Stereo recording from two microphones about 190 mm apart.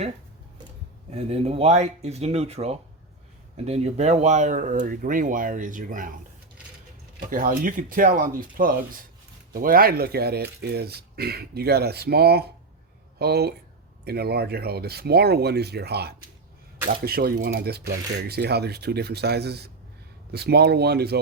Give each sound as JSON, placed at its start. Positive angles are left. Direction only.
{"t": 1.1, "sound": "speech", "side_deg": -35}
{"t": 7.3, "sound": "speech", "side_deg": -45}